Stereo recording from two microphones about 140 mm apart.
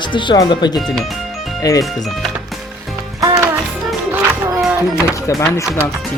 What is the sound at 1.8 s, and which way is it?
Speech, centre (ahead or behind).